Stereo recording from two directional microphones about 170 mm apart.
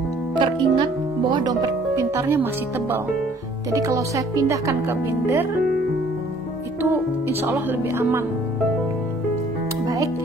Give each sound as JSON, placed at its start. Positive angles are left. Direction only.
{"t": 0.4, "sound": "speech", "side_deg": -30}
{"t": 3.7, "sound": "speech", "side_deg": -20}
{"t": 6.8, "sound": "speech", "side_deg": -10}